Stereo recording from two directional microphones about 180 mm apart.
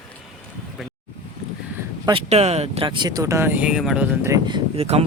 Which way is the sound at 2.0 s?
35° right (ahead or behind).